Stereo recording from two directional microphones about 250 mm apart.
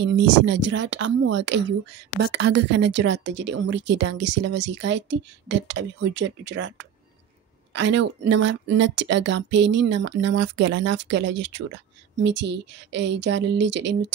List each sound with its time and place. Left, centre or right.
0.0 s speech: right